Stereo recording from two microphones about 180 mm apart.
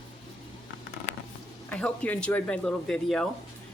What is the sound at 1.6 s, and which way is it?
Speech, 5° left (ahead or behind).